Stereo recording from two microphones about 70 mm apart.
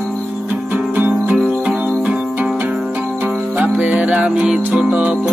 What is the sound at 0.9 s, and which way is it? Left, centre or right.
Music, right.